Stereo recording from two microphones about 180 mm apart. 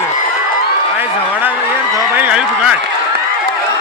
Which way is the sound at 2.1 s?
10° right (ahead or behind).